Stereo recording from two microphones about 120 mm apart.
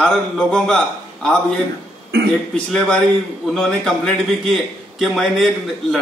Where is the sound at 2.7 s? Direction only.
5° left (ahead or behind).